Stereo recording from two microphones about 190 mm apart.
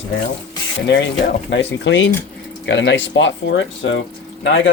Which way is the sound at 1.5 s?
75° left (ahead or behind).